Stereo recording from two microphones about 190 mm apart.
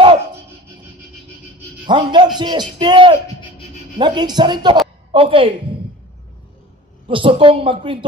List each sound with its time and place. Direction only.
1.9 s a man's voice: 25° right (ahead or behind)
7.1 s a man's voice: 30° right (ahead or behind)